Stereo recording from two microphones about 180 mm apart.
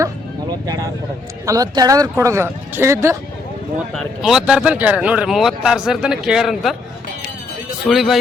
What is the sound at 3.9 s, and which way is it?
Speech, centre (ahead or behind).